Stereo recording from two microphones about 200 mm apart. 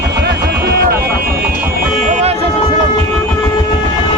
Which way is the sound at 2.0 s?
40° right (ahead or behind).